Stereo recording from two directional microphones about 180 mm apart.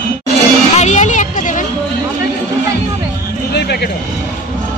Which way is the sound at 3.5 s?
65° left (ahead or behind).